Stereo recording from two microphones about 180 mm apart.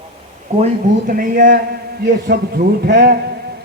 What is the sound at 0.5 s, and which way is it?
Speech, 45° right (ahead or behind).